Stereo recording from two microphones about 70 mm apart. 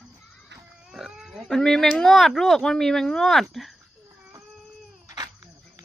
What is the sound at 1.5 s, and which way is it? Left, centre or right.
Speech, centre.